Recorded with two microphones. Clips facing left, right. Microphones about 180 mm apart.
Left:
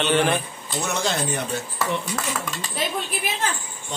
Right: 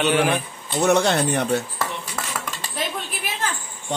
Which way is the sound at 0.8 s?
65° right (ahead or behind).